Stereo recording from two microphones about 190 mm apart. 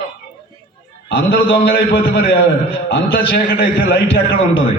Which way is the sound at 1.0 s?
55° left (ahead or behind).